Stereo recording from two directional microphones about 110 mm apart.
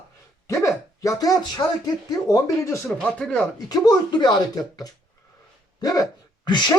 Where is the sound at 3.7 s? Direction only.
35° left (ahead or behind).